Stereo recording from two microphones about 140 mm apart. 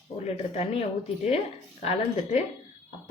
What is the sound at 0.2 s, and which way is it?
Speech, 50° left (ahead or behind).